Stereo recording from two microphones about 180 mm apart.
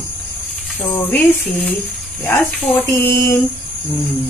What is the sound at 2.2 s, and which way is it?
Speech, 10° left (ahead or behind).